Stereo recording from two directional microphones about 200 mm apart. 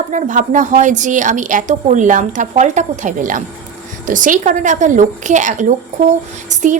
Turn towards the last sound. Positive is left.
turn(degrees=-40)  # may be behind; listen again after turning